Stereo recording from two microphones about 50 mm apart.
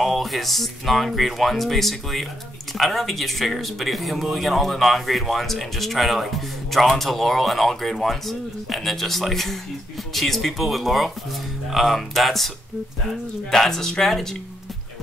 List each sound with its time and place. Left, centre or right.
0.0 s speech: centre